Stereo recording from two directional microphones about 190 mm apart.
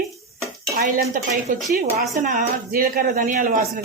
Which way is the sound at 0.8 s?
50° right (ahead or behind).